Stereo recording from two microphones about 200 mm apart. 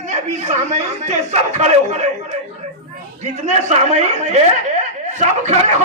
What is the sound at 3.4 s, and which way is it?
A man's voice, 35° right (ahead or behind).